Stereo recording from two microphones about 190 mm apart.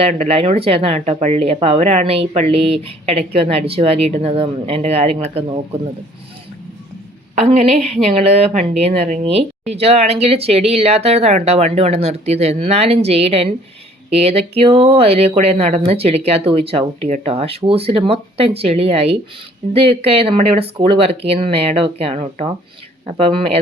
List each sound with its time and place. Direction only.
0.0 s speech: 35° right (ahead or behind)
7.3 s speech: 35° right (ahead or behind)